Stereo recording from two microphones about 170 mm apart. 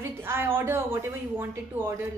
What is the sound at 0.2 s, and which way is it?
Speech, 15° right (ahead or behind).